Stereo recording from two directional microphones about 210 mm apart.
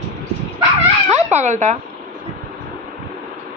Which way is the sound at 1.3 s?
35° right (ahead or behind).